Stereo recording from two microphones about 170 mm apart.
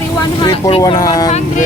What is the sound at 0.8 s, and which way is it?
Speech, 20° left (ahead or behind).